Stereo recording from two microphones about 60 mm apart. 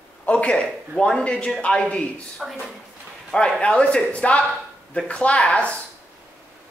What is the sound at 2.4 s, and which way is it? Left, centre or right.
Speech, centre.